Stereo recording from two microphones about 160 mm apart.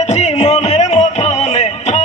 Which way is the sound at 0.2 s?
45° left (ahead or behind).